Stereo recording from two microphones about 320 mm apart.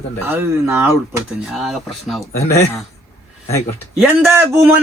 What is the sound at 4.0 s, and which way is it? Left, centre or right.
Speech, centre.